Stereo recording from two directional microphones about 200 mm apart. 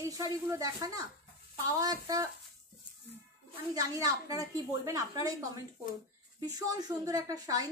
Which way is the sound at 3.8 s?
20° right (ahead or behind).